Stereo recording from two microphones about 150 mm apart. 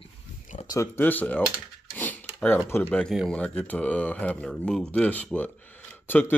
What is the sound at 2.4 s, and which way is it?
Speech, 15° left (ahead or behind).